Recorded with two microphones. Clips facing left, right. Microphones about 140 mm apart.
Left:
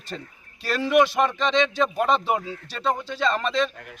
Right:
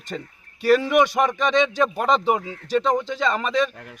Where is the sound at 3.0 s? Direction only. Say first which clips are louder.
Right 1 dB; 15° right (ahead or behind).